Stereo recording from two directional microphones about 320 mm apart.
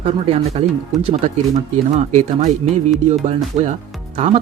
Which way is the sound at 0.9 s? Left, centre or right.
Centre.